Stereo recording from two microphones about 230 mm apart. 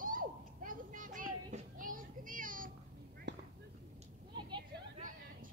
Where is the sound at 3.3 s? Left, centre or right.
Right.